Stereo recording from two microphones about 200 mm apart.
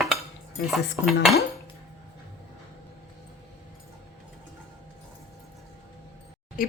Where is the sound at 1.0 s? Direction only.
Centre (ahead or behind).